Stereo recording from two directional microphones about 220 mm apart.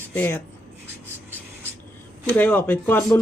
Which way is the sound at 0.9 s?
10° right (ahead or behind).